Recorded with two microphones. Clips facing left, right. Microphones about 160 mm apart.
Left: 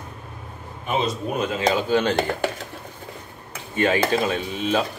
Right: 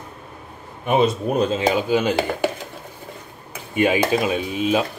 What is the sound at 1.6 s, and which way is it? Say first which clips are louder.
Speech: right 1 dB; 10° right (ahead or behind).